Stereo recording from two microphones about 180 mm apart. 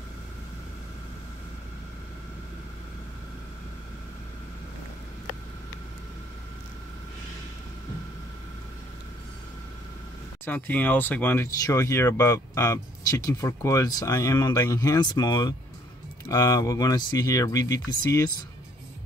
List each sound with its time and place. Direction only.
10.4 s speech: 10° left (ahead or behind)